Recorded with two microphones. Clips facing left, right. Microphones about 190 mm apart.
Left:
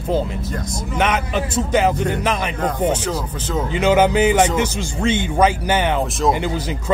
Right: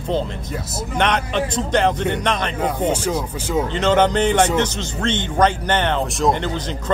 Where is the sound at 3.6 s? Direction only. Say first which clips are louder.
Left 2 dB; 10° left (ahead or behind).